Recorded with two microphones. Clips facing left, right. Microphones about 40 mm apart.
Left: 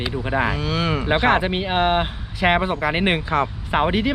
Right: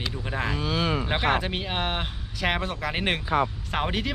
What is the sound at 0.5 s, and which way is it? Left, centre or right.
Speech, centre.